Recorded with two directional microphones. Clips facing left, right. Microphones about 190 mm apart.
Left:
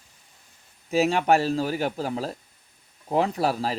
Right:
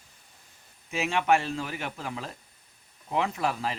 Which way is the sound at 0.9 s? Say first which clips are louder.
Left 5 dB; 35° left (ahead or behind).